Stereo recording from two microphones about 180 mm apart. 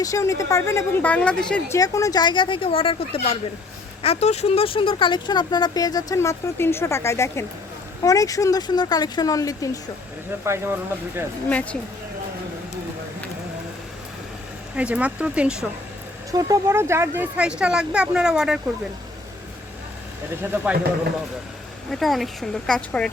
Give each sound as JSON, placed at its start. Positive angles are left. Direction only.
{"t": 0.0, "sound": "speech", "side_deg": 15}
{"t": 1.7, "sound": "speech", "side_deg": 20}
{"t": 10.4, "sound": "speech", "side_deg": -15}
{"t": 11.4, "sound": "speech", "side_deg": 10}
{"t": 14.8, "sound": "speech", "side_deg": -5}
{"t": 16.3, "sound": "speech", "side_deg": -20}
{"t": 20.3, "sound": "speech", "side_deg": -10}
{"t": 21.9, "sound": "speech", "side_deg": 0}